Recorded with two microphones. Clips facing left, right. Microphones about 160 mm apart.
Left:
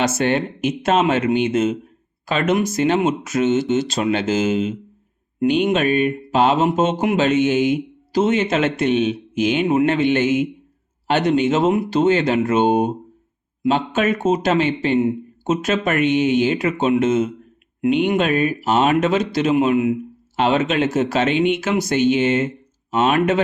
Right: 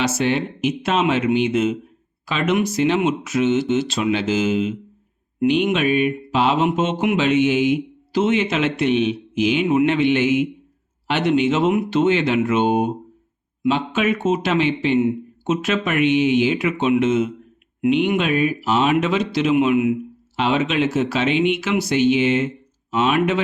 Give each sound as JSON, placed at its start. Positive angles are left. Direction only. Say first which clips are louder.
{"t": 0.0, "sound": "speech", "louder": "left 1 dB", "side_deg": 50}